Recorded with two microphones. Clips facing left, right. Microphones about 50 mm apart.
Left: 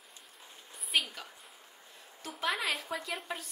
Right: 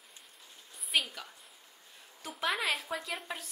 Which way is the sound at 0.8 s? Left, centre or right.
Centre.